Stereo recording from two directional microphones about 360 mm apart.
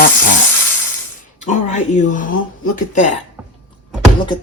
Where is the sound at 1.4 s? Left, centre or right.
Centre.